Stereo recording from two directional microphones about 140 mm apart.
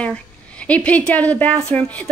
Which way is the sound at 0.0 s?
10° left (ahead or behind).